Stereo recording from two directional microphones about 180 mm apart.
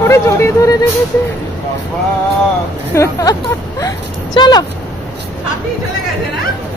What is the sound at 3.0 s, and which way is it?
Speech, 20° left (ahead or behind).